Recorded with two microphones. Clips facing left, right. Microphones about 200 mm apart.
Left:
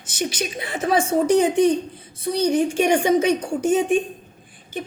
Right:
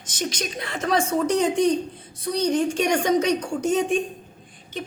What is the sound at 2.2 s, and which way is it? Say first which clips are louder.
A woman's voice: left 3 dB; 5° left (ahead or behind).